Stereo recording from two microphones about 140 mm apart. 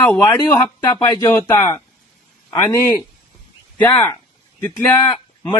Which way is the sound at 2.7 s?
15° left (ahead or behind).